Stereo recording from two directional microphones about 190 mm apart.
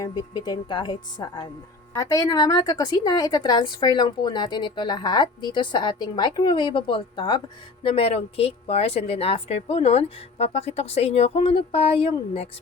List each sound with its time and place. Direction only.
0.0 s a woman's voice: 25° left (ahead or behind)